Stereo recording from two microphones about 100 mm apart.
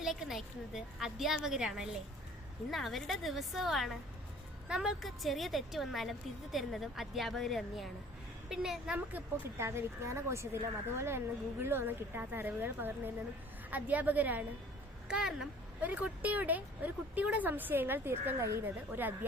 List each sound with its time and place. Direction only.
0.0 s a woman's voice: 5° right (ahead or behind)
9.1 s a woman's voice: 25° right (ahead or behind)